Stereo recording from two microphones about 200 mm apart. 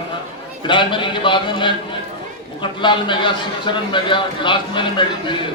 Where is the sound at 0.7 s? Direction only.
25° left (ahead or behind).